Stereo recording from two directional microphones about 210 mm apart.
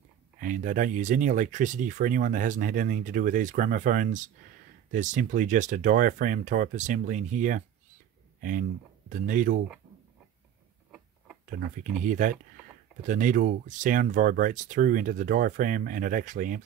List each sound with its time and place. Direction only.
0.4 s speech: 40° right (ahead or behind)
12.0 s speech: 40° right (ahead or behind)